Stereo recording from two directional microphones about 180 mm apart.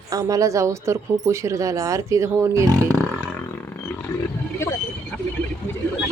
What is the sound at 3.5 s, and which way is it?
Wild animals, 10° left (ahead or behind).